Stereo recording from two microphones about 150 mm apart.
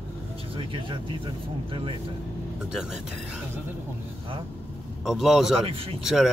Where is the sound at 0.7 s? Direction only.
35° right (ahead or behind).